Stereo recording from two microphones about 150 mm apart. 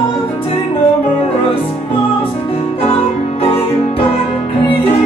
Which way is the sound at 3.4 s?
40° left (ahead or behind).